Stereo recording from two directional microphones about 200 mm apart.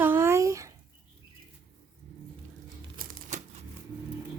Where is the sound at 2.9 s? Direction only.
35° right (ahead or behind).